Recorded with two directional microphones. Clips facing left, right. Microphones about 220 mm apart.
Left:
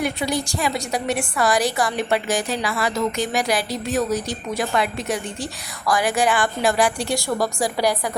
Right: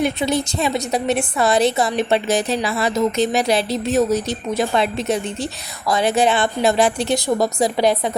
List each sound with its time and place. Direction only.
0.0 s a woman's voice: 25° right (ahead or behind)